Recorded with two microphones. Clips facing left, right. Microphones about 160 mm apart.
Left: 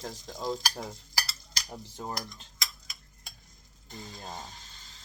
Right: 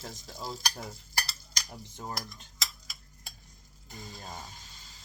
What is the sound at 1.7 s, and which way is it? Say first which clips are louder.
Speech: left 4 dB; 30° left (ahead or behind).